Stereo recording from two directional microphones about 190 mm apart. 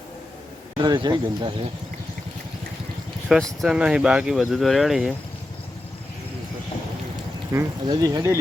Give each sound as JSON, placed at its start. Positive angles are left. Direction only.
{"t": 0.8, "sound": "speech", "side_deg": -25}
{"t": 3.6, "sound": "speech", "side_deg": -5}
{"t": 7.5, "sound": "speech", "side_deg": -20}